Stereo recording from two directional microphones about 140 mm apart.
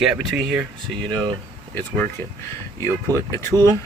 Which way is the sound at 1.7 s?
10° left (ahead or behind).